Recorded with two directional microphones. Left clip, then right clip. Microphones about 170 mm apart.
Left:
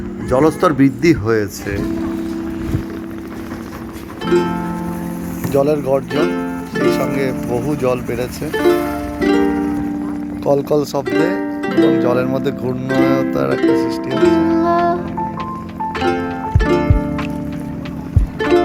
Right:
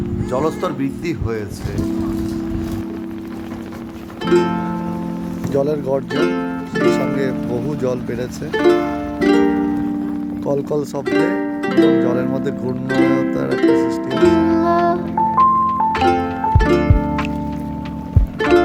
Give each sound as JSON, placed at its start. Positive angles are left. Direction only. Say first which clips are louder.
{"t": 0.3, "sound": "speech", "louder": "left 7 dB", "side_deg": 25}
{"t": 4.3, "sound": "music", "louder": "even", "side_deg": 0}
{"t": 5.5, "sound": "speech", "louder": "left 3 dB", "side_deg": -15}
{"t": 5.9, "sound": "speech", "louder": "left 2 dB", "side_deg": 0}
{"t": 7.8, "sound": "speech", "louder": "left 3 dB", "side_deg": -20}
{"t": 8.5, "sound": "music", "louder": "even", "side_deg": 0}
{"t": 11.1, "sound": "music", "louder": "right 2 dB", "side_deg": 0}
{"t": 12.0, "sound": "speech", "louder": "left 3 dB", "side_deg": -15}
{"t": 12.6, "sound": "speech", "louder": "even", "side_deg": 0}
{"t": 13.5, "sound": "music", "louder": "right 2 dB", "side_deg": 0}
{"t": 18.3, "sound": "music", "louder": "even", "side_deg": 0}